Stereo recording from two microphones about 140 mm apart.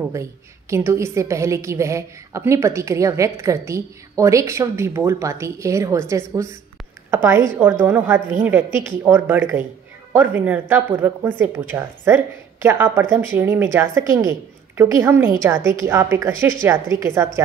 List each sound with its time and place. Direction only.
0.1 s a woman's voice: 20° right (ahead or behind)